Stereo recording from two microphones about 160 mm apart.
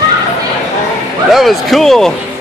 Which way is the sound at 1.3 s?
Centre (ahead or behind).